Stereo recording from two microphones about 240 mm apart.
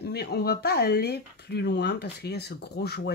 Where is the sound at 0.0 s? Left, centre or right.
Left.